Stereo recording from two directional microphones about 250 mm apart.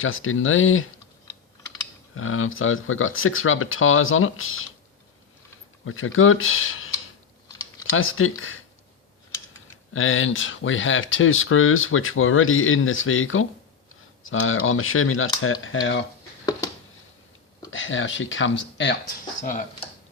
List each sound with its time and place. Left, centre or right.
0.0 s speech: left
2.1 s speech: left
5.8 s speech: left
9.9 s speech: left
17.7 s speech: left
19.4 s speech: left